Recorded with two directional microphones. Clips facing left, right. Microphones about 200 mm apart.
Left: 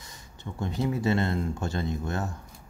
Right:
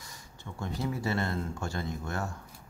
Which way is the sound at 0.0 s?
20° left (ahead or behind).